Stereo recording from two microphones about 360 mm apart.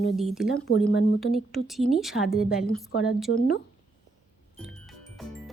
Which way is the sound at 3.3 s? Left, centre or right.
Left.